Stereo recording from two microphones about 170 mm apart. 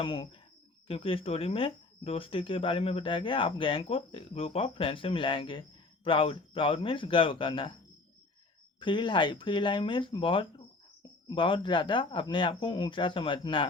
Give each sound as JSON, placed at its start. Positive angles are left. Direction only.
{"t": 0.0, "sound": "speech", "side_deg": 30}
{"t": 8.8, "sound": "speech", "side_deg": 30}